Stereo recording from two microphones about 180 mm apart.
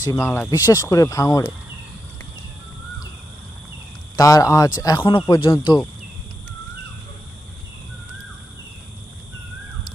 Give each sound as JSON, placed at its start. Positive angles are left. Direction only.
{"t": 0.0, "sound": "speech", "side_deg": 15}
{"t": 4.2, "sound": "speech", "side_deg": 20}